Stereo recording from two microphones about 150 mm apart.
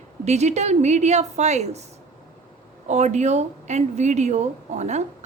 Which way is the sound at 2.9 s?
50° right (ahead or behind).